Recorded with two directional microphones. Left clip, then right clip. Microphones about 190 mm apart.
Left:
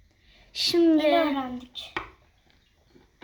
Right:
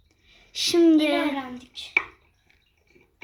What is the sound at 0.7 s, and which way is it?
Speech, 15° right (ahead or behind).